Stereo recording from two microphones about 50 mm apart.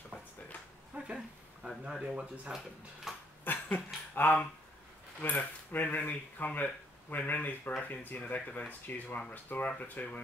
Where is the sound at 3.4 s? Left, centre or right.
Left.